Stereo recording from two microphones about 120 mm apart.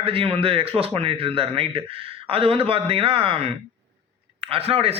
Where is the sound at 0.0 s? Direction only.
50° right (ahead or behind).